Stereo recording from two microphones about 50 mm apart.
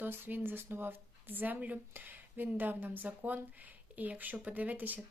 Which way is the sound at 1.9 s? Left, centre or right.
Right.